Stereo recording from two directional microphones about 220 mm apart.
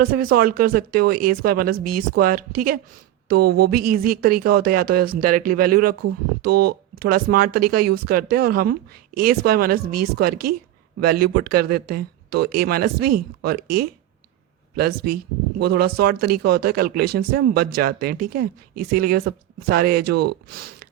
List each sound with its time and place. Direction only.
0.0 s speech: 40° right (ahead or behind)